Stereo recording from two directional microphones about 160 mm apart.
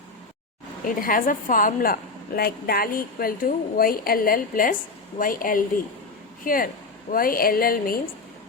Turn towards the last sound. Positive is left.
turn(degrees=65)  # may be behind; listen again after turning